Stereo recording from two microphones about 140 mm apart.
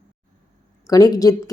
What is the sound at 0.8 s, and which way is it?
Speech, 25° left (ahead or behind).